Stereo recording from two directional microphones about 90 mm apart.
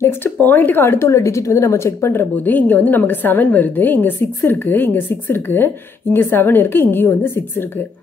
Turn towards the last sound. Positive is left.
turn(degrees=25)  # may be behind; listen again after turning